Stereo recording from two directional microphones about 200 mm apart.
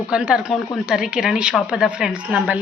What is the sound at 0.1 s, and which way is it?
Speech, 5° right (ahead or behind).